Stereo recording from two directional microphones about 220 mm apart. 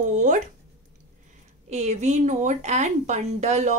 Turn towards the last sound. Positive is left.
turn(degrees=-30)  # may be behind; listen again after turning